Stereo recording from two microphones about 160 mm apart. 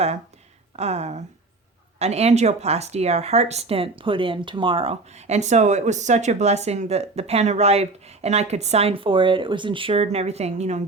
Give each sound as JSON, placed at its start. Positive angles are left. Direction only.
{"t": 0.8, "sound": "speech", "side_deg": -40}